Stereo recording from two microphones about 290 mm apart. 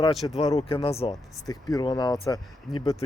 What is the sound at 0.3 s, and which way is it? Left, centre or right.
Speech, centre.